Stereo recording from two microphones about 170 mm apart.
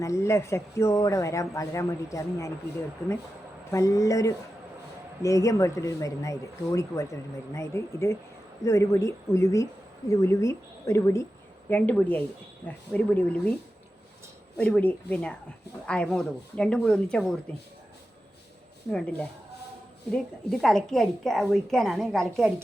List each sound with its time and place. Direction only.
0.0 s speech: 15° left (ahead or behind)
14.6 s speech: 5° left (ahead or behind)
18.9 s speech: 5° left (ahead or behind)